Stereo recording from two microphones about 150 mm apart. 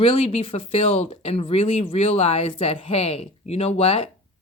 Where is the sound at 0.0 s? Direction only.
40° left (ahead or behind).